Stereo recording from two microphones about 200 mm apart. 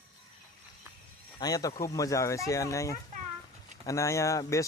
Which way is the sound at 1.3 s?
20° left (ahead or behind).